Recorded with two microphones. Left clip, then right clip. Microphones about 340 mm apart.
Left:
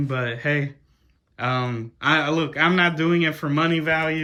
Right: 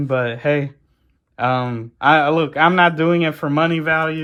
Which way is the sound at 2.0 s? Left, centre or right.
Centre.